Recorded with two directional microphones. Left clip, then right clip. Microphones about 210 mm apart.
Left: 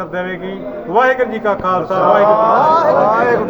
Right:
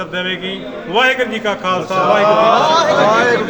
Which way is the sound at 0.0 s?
60° right (ahead or behind).